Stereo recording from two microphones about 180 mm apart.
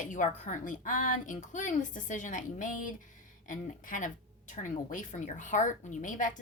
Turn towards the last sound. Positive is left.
turn(degrees=45)  # may be behind; listen again after turning